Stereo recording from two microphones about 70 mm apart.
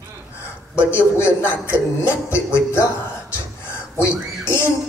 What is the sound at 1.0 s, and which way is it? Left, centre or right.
Speech, left.